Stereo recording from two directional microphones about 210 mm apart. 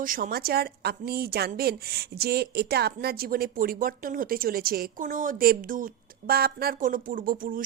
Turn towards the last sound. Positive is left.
turn(degrees=-40)  # may be behind; listen again after turning